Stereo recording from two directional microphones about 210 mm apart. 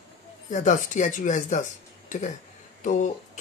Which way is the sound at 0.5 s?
35° left (ahead or behind).